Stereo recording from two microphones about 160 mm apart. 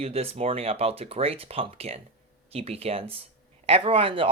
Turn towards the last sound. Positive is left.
turn(degrees=-35)  # may be behind; listen again after turning